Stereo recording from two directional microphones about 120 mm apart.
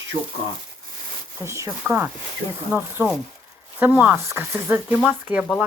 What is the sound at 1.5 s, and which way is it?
Speech, 25° right (ahead or behind).